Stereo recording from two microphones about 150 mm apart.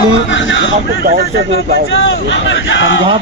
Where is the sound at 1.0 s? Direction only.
85° right.